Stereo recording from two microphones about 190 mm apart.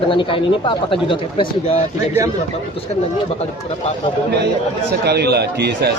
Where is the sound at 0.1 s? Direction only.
25° left (ahead or behind).